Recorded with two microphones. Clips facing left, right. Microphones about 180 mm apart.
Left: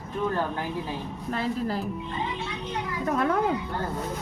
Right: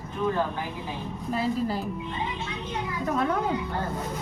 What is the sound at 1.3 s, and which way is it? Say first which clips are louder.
Speech: right 1 dB; 5° right (ahead or behind).